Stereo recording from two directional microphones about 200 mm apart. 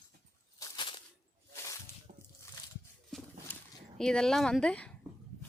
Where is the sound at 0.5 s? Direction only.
20° left (ahead or behind).